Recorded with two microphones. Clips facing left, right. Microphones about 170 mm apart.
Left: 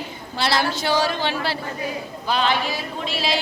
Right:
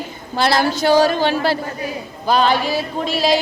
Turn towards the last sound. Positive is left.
turn(degrees=-40)  # may be behind; listen again after turning